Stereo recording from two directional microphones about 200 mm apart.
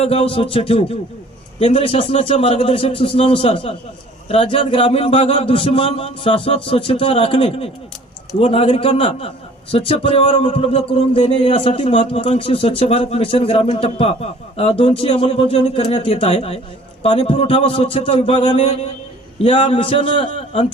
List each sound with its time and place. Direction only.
0.0 s speech: 30° left (ahead or behind)